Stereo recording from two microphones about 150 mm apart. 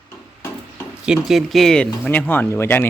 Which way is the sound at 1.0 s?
5° right (ahead or behind).